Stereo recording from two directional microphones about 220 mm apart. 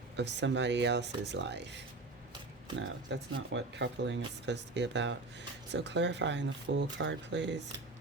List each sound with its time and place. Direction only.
0.2 s speech: 55° right (ahead or behind)